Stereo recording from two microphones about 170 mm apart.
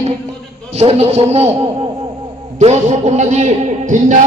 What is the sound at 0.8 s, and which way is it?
A man's voice, 40° right (ahead or behind).